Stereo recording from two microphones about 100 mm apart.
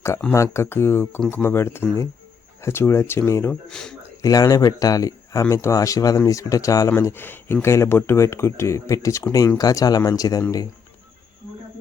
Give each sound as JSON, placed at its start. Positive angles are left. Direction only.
{"t": 0.3, "sound": "speech", "side_deg": 30}
{"t": 3.5, "sound": "speech", "side_deg": 5}
{"t": 4.2, "sound": "speech", "side_deg": 40}